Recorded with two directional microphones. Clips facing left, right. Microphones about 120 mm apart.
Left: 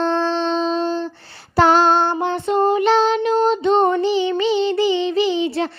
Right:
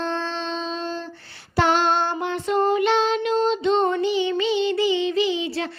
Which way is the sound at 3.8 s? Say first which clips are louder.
Left 4 dB; 35° left (ahead or behind).